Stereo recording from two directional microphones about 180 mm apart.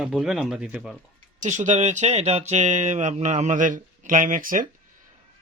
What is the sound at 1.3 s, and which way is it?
Speech, 45° right (ahead or behind).